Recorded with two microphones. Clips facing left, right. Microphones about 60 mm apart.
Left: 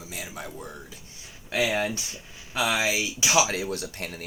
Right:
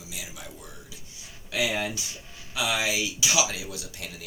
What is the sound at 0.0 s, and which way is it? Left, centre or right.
Speech, left.